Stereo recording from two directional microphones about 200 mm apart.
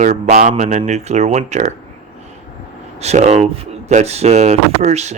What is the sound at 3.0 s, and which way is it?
Speech, 35° right (ahead or behind).